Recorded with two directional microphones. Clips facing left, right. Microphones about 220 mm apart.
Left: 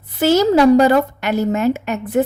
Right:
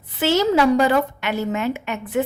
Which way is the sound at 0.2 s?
40° left (ahead or behind).